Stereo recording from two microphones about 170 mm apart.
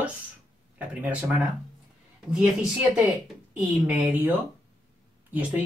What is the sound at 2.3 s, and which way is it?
Speech, 10° right (ahead or behind).